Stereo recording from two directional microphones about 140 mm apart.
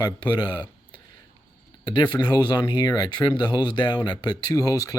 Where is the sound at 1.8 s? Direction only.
30° left (ahead or behind).